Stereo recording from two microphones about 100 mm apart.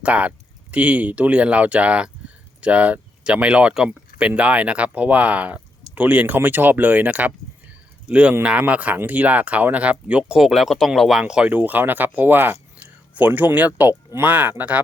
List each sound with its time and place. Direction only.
0.0 s speech: 15° right (ahead or behind)